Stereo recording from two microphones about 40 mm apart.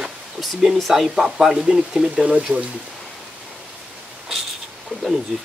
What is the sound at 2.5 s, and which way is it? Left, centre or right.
Speech, right.